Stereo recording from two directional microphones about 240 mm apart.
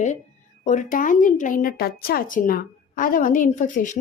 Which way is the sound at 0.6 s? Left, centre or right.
Left.